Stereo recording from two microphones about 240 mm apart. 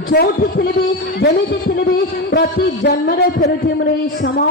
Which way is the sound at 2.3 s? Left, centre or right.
Left.